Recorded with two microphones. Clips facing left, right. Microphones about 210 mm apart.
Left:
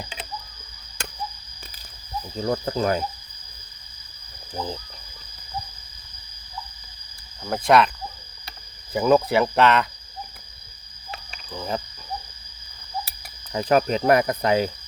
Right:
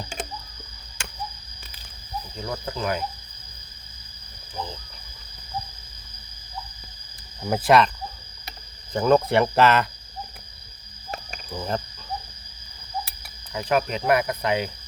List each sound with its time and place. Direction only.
1.0 s a sound: 40° left (ahead or behind)
2.3 s speech: 40° left (ahead or behind)
7.4 s speech: 5° right (ahead or behind)
8.9 s speech: 5° left (ahead or behind)
11.5 s speech: centre (ahead or behind)
13.2 s cricket: 40° left (ahead or behind)